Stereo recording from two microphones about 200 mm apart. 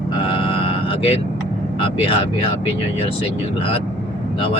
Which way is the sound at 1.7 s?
25° left (ahead or behind).